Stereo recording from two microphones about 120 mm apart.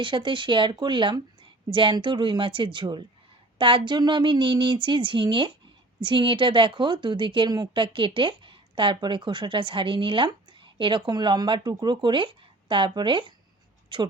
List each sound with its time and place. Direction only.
0.0 s a woman's voice: 45° right (ahead or behind)